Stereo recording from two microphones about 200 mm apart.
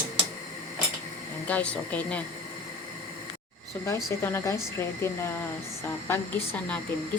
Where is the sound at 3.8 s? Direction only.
15° left (ahead or behind).